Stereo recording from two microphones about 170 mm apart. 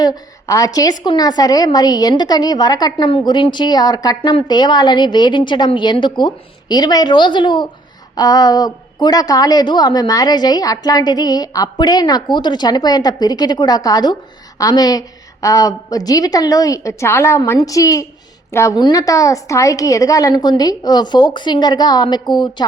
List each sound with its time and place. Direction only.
0.0 s a woman's voice: 20° left (ahead or behind)